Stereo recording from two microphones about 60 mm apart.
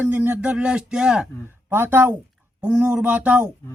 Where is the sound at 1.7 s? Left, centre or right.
Right.